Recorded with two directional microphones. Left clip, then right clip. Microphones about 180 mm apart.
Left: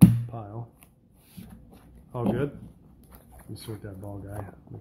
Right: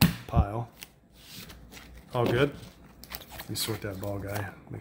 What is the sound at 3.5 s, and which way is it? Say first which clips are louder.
Speech: right 8 dB; 30° right (ahead or behind).